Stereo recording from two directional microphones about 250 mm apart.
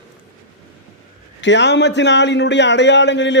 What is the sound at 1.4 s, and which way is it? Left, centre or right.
A man's voice, left.